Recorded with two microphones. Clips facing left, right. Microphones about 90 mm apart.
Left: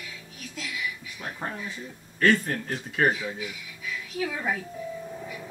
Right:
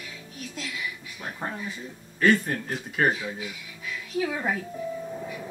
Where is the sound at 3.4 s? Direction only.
25° right (ahead or behind).